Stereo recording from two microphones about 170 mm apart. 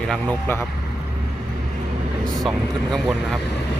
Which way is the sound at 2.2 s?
5° left (ahead or behind).